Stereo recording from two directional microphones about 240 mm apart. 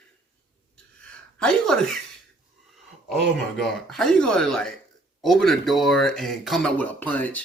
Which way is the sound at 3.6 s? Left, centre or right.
Centre.